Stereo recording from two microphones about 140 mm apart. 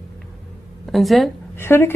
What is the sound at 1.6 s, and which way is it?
Speech, 15° left (ahead or behind).